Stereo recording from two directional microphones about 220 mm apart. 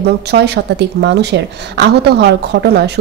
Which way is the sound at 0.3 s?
50° right (ahead or behind).